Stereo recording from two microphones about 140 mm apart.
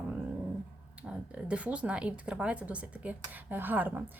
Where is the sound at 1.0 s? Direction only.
10° right (ahead or behind).